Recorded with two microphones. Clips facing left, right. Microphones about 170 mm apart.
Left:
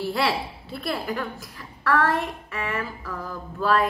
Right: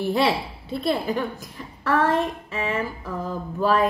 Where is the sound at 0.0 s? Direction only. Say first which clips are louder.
Right 3 dB; 20° right (ahead or behind).